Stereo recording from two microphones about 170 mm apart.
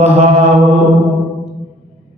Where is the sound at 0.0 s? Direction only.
35° right (ahead or behind).